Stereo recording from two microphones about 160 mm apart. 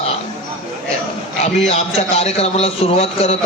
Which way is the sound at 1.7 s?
40° left (ahead or behind).